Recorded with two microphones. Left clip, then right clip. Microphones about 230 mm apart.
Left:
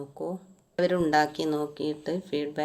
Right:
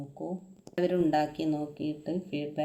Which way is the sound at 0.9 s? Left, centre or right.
Left.